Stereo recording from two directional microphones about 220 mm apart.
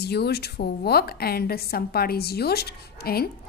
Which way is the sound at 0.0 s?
45° left (ahead or behind).